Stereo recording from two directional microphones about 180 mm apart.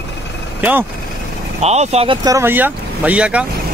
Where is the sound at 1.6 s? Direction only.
35° right (ahead or behind).